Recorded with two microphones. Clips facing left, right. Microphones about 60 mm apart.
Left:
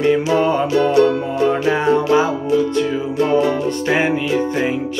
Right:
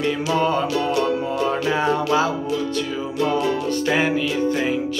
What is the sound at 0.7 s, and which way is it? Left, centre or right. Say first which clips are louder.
Music: left 7 dB; left.